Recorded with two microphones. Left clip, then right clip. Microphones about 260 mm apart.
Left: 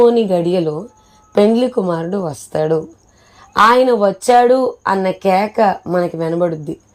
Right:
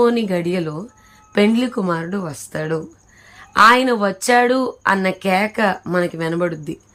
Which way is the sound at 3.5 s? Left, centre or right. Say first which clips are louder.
Left 2 dB; centre.